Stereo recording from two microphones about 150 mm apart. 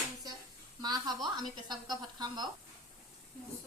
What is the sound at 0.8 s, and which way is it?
Speech, 25° right (ahead or behind).